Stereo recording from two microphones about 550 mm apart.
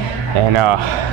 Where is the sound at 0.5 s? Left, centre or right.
Right.